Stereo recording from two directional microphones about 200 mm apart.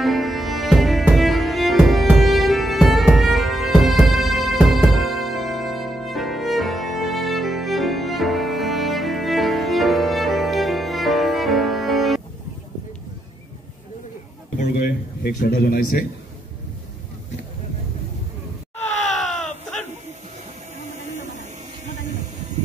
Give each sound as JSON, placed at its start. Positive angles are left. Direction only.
{"t": 0.0, "sound": "music", "side_deg": 0}
{"t": 15.2, "sound": "a man's voice", "side_deg": 50}
{"t": 19.0, "sound": "baby cry", "side_deg": 0}
{"t": 20.8, "sound": "a sound", "side_deg": -35}